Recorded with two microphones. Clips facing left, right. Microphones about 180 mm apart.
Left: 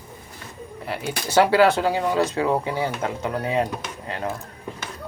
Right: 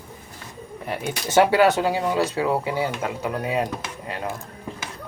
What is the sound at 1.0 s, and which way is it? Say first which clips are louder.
Speech: even; 20° right (ahead or behind).